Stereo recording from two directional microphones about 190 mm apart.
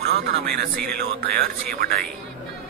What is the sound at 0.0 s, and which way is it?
A man's voice, 55° right (ahead or behind).